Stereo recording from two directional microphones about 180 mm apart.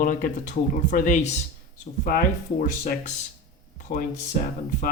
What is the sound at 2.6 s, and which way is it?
Speech, 45° left (ahead or behind).